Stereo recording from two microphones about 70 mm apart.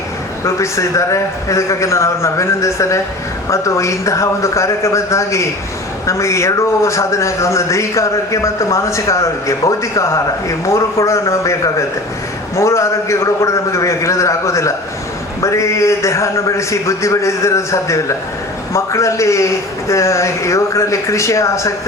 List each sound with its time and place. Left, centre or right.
0.4 s a man's voice: left